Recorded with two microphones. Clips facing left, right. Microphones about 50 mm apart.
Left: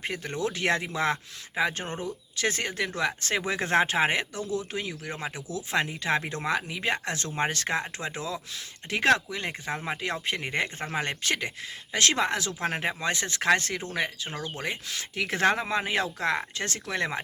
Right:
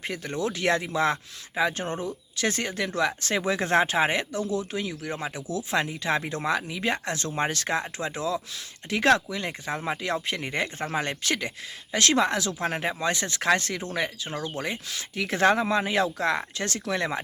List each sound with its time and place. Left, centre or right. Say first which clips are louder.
0.0 s speech: right 1 dB; left
4.4 s speech: right 3 dB; right
4.7 s speech: right 3 dB; left
9.7 s speech: right 5 dB; centre
10.2 s speech: even; left